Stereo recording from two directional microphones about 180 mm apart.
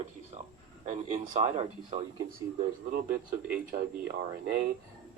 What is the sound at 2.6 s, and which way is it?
Speech, 55° right (ahead or behind).